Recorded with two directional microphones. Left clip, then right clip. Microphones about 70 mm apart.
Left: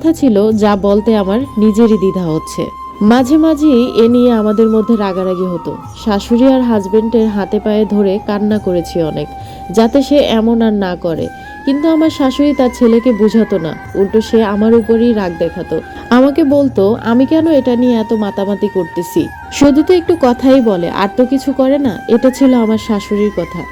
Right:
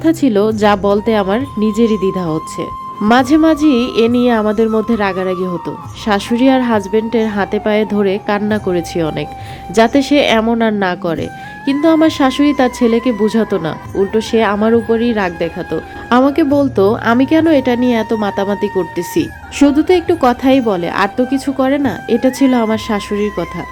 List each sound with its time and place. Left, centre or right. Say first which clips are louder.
0.0 s speech: left 2 dB; left
5.6 s a woman's voice: even; left
8.7 s a woman's voice: left 2 dB; left
13.2 s a woman's voice: left 2 dB; left
16.6 s speech: left 1 dB; left
17.0 s a woman's voice: even; left
19.7 s a woman's voice: left 2 dB; left
20.4 s a woman's voice: left 3 dB; left
20.7 s a woman's voice: left 1 dB; left
21.2 s a woman's voice: left 3 dB; left
21.7 s speech: left 3 dB; left